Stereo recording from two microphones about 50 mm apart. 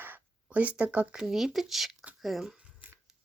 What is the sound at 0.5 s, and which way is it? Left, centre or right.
Speech, right.